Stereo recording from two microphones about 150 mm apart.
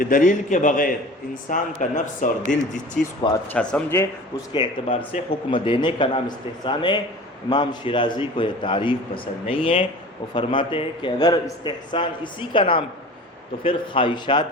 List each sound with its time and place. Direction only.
0.0 s a man's voice: 65° left (ahead or behind)
3.0 s speech: 5° left (ahead or behind)
4.5 s a man's voice: 35° left (ahead or behind)